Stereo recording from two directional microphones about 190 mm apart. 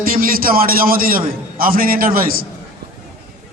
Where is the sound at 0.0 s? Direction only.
50° right (ahead or behind).